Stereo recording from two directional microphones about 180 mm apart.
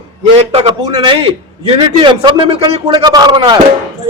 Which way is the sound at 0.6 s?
25° right (ahead or behind).